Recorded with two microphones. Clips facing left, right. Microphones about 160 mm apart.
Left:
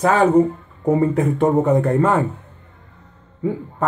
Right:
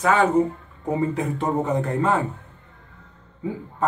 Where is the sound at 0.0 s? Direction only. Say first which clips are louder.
Left 4 dB; 40° left (ahead or behind).